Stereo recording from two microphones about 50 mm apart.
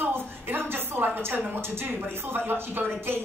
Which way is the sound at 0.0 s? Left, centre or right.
Right.